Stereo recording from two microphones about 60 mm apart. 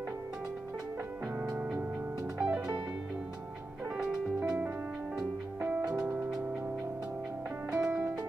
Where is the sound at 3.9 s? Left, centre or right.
Centre.